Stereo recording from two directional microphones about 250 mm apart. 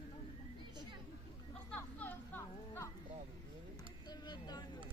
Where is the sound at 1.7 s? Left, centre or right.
Centre.